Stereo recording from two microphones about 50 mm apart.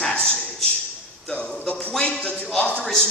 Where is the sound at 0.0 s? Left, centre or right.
Centre.